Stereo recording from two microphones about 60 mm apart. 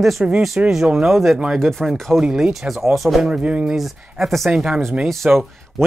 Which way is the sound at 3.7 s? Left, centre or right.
Centre.